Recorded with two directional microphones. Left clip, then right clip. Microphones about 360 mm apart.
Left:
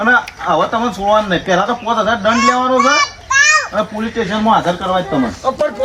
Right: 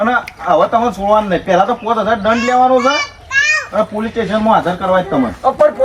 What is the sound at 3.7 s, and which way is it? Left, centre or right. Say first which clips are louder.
Speech: right 2 dB; centre.